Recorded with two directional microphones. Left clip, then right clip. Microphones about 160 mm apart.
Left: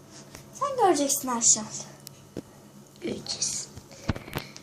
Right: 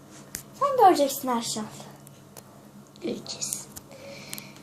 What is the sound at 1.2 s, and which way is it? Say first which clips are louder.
Speech: right 3 dB; 25° right (ahead or behind).